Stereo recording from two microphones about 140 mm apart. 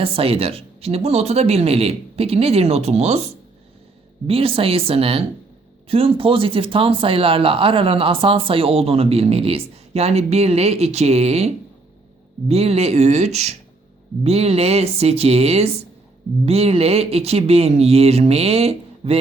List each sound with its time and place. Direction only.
0.0 s speech: 40° right (ahead or behind)
4.3 s speech: 40° right (ahead or behind)